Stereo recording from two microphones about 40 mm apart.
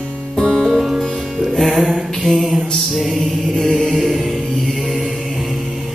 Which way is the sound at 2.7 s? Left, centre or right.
Centre.